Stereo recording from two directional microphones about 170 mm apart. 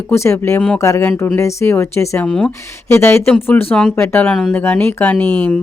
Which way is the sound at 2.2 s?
5° left (ahead or behind).